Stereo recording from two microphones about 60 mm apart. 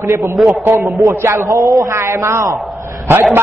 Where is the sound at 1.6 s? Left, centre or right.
Right.